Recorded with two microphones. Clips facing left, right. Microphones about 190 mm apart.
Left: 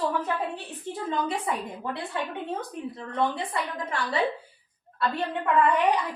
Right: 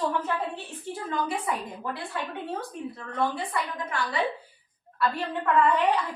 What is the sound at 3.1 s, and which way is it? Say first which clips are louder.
Speech: left 1 dB; 20° left (ahead or behind).